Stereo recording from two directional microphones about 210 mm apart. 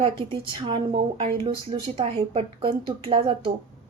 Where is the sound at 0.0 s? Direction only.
25° right (ahead or behind).